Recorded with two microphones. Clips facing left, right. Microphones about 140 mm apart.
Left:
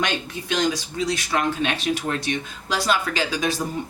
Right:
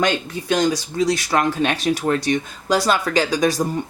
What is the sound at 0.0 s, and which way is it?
Speech, 40° right (ahead or behind).